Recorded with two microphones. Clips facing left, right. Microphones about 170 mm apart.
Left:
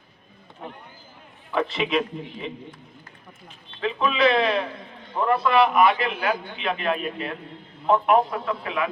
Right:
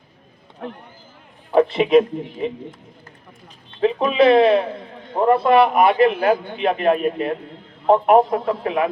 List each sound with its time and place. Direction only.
1.5 s a man's voice: 50° right (ahead or behind)
3.8 s a man's voice: 40° right (ahead or behind)